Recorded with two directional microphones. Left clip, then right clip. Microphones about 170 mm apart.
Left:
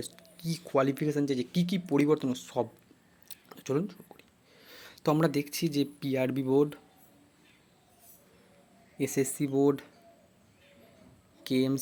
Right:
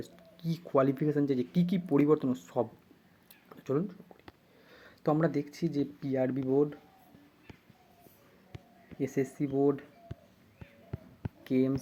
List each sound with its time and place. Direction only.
0.0 s speech: 10° left (ahead or behind)
3.2 s a sound: 15° left (ahead or behind)
5.2 s speech: 25° left (ahead or behind)
9.0 s speech: 25° left (ahead or behind)
11.4 s speech: 20° left (ahead or behind)